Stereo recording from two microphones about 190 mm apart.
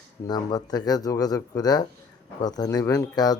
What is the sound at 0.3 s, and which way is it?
A man's voice, 20° left (ahead or behind).